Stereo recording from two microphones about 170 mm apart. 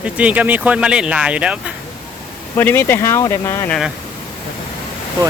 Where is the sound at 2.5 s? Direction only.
15° left (ahead or behind).